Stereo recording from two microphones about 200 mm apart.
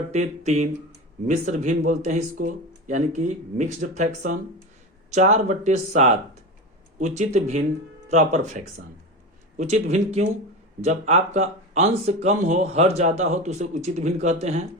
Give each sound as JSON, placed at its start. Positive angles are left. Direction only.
{"t": 0.1, "sound": "speech", "side_deg": -35}